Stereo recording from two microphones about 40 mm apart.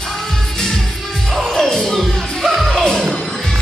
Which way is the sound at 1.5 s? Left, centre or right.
Centre.